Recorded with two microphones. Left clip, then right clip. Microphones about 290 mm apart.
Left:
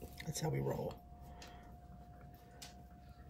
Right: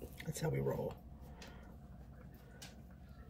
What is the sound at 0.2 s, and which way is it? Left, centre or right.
Speech, centre.